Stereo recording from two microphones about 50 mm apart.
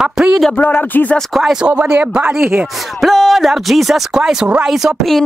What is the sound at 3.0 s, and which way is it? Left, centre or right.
Speech, centre.